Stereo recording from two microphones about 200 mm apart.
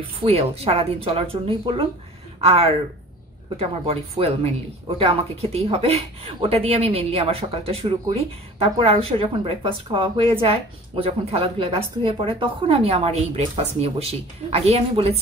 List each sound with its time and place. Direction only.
0.2 s a woman's voice: 30° right (ahead or behind)